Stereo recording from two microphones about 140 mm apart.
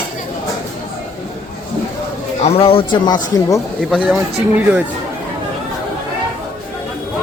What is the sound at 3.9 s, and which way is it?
Speech, 5° right (ahead or behind).